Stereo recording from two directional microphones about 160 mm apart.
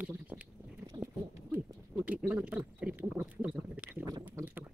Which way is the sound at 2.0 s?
10° right (ahead or behind).